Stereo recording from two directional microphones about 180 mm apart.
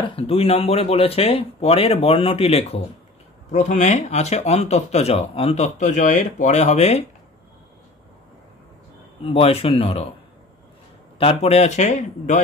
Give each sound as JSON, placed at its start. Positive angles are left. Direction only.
{"t": 0.0, "sound": "speech", "side_deg": 30}
{"t": 9.2, "sound": "speech", "side_deg": 30}
{"t": 11.1, "sound": "speech", "side_deg": 35}